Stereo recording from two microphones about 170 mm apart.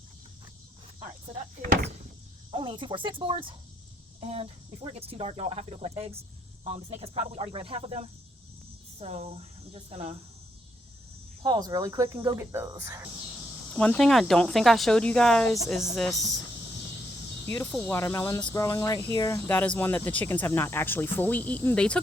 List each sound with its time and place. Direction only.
2.5 s speech: 30° right (ahead or behind)
11.4 s speech: 25° right (ahead or behind)
12.0 s speech: 30° right (ahead or behind)
12.4 s speech: 15° right (ahead or behind)
13.7 s speech: 5° left (ahead or behind)
17.5 s speech: 10° left (ahead or behind)